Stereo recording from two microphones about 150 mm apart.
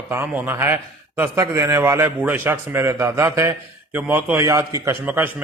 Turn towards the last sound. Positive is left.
turn(degrees=-10)  # may be behind; listen again after turning